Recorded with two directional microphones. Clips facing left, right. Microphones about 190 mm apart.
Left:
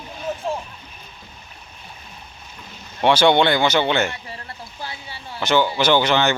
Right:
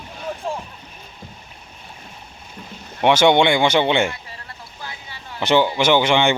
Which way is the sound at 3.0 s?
20° right (ahead or behind).